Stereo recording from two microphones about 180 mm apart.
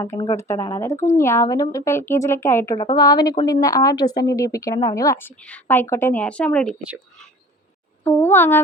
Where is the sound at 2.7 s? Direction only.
25° left (ahead or behind); by 6.7 s 5° left (ahead or behind).